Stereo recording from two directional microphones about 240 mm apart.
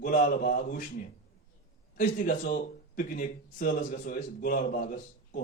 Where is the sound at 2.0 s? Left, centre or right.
Left.